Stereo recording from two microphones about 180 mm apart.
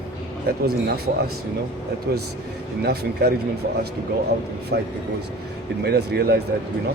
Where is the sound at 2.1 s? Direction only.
70° right (ahead or behind).